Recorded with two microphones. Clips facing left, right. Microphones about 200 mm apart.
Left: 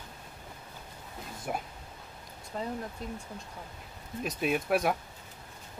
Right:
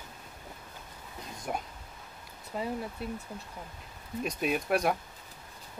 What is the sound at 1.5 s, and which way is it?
Speech, 5° left (ahead or behind).